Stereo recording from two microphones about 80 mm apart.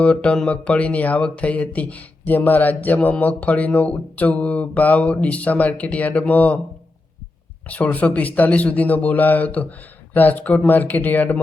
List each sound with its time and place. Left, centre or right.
0.0 s speech: centre
7.7 s speech: centre